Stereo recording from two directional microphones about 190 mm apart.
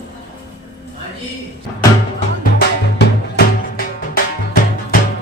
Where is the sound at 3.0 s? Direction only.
50° left (ahead or behind).